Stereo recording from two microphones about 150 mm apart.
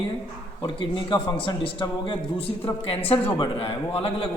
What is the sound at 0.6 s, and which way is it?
A man's voice, 30° left (ahead or behind).